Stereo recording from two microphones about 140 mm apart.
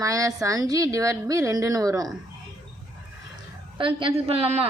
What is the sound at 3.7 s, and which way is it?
Speech, 40° right (ahead or behind).